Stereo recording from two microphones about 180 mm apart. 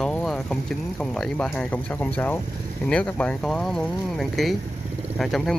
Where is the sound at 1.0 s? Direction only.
5° left (ahead or behind).